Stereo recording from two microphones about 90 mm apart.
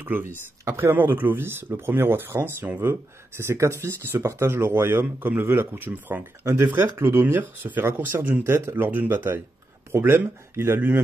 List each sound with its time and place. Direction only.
0.0 s speech: 20° right (ahead or behind)